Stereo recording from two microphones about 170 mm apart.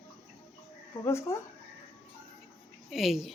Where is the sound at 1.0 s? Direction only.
15° left (ahead or behind).